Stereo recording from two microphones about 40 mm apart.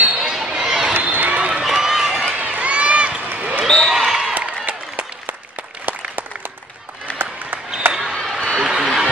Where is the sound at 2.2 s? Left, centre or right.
Right.